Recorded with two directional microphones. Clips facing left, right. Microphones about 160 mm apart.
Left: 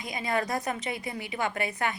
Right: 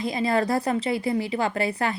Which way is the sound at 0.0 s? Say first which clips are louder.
Right 7 dB; 30° right (ahead or behind).